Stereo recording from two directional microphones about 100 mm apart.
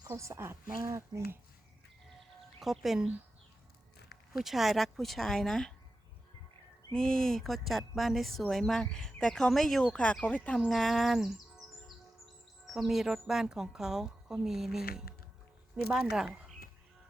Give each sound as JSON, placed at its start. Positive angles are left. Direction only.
{"t": 0.1, "sound": "speech", "side_deg": -30}
{"t": 2.6, "sound": "speech", "side_deg": -5}
{"t": 4.4, "sound": "speech", "side_deg": -5}
{"t": 6.9, "sound": "speech", "side_deg": 5}
{"t": 10.6, "sound": "speech", "side_deg": 0}
{"t": 12.6, "sound": "speech", "side_deg": -5}